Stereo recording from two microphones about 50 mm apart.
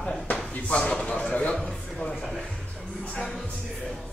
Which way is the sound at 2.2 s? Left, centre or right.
Centre.